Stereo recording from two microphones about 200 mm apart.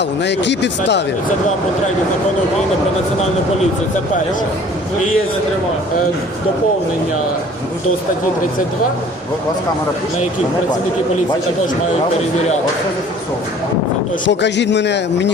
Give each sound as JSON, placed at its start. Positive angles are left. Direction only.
{"t": 0.2, "sound": "speech", "side_deg": 60}
{"t": 14.3, "sound": "speech", "side_deg": 60}